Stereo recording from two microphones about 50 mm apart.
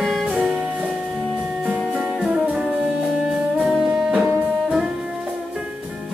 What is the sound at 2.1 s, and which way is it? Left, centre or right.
Music, centre.